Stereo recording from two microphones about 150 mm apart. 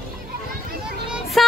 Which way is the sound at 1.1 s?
Centre (ahead or behind).